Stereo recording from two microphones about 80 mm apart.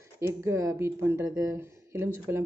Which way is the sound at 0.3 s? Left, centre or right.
Right.